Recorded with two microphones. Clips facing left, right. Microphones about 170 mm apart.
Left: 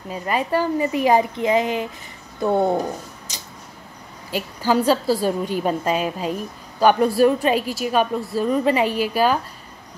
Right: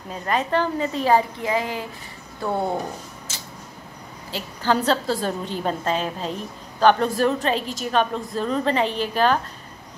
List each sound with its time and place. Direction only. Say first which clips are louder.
0.1 s a woman's voice: left 1 dB; 10° left (ahead or behind)
3.3 s tick-tock: even; 15° left (ahead or behind)
4.3 s a woman's voice: left 2 dB; 10° left (ahead or behind)